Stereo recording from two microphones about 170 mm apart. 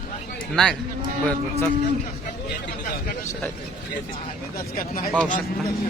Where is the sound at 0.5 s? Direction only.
Centre (ahead or behind).